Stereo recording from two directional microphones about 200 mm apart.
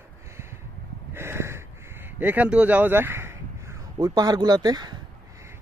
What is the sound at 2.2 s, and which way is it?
Speech, 10° right (ahead or behind).